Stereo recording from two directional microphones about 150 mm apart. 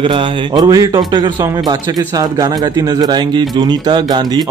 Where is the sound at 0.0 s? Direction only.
30° right (ahead or behind).